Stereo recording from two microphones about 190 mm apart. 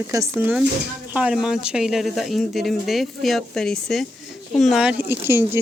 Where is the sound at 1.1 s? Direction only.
5° right (ahead or behind).